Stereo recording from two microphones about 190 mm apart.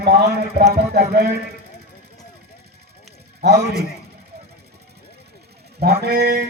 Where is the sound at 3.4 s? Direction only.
55° right (ahead or behind).